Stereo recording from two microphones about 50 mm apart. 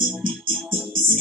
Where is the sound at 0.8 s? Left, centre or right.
Centre.